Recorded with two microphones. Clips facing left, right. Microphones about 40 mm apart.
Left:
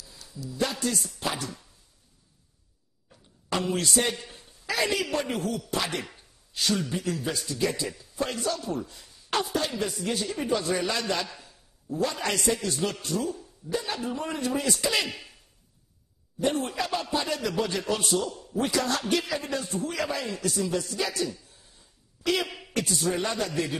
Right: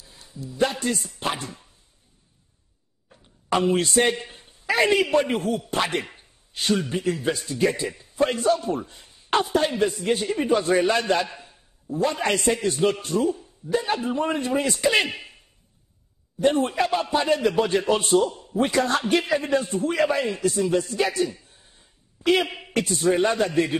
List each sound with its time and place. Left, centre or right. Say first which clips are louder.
0.0 s a man's voice: right 2 dB; right
1.1 s chopping: right 3 dB; right
3.4 s a man's voice: right 6 dB; right